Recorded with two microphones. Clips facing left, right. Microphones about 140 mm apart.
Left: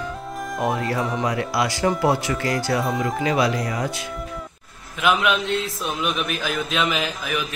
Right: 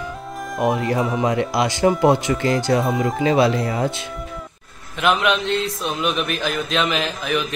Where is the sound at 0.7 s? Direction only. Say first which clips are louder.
Right 3 dB; 20° right (ahead or behind).